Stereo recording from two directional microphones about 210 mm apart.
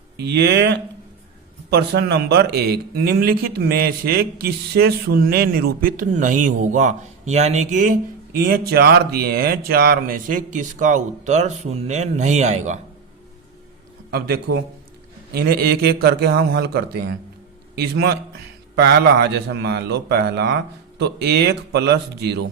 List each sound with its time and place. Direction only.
0.2 s speech: 55° right (ahead or behind); by 12.8 s 35° right (ahead or behind)
14.1 s speech: 45° right (ahead or behind)